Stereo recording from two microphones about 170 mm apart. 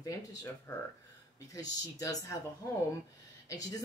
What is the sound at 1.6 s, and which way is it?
Speech, 20° left (ahead or behind).